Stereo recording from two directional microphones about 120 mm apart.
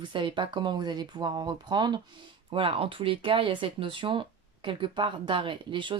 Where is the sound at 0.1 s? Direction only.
40° right (ahead or behind).